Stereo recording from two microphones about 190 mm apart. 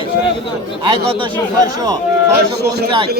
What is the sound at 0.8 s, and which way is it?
Speech, 25° right (ahead or behind).